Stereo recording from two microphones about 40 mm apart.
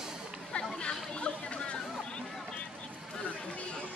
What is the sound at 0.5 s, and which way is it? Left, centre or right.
Chatter, left.